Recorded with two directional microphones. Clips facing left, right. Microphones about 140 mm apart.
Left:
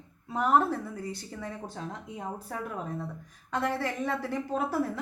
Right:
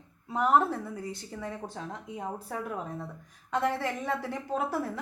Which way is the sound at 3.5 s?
20° right (ahead or behind).